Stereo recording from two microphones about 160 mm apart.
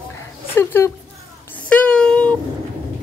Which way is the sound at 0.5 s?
15° left (ahead or behind).